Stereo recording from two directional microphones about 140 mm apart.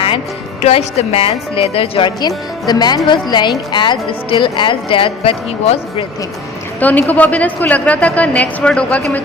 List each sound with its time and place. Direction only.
0.6 s a woman's voice: 50° left (ahead or behind)
6.7 s a woman's voice: 10° left (ahead or behind)